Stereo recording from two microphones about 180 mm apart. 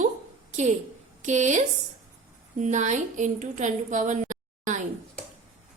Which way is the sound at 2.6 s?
40° right (ahead or behind).